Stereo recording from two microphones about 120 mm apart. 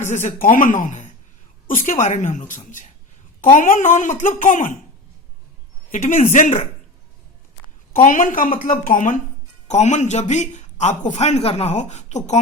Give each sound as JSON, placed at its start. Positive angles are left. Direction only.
{"t": 0.1, "sound": "a woman's voice", "side_deg": 80}
{"t": 5.9, "sound": "speech", "side_deg": 75}
{"t": 8.0, "sound": "a woman's voice", "side_deg": 90}
{"t": 9.6, "sound": "a man's voice", "side_deg": 70}